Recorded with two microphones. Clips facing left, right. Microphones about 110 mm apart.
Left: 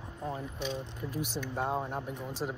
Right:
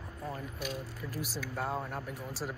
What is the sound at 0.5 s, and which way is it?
Speech, 5° right (ahead or behind).